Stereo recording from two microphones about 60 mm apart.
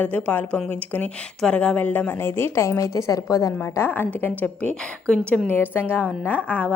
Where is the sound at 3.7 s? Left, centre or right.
Left.